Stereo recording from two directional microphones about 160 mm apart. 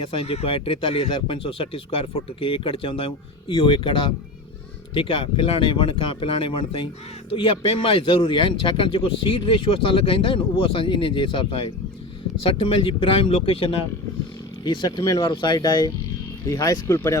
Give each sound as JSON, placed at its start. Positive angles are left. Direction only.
{"t": 0.0, "sound": "speech", "side_deg": 35}